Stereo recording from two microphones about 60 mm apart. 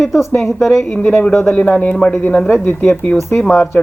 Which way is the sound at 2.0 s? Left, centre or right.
Centre.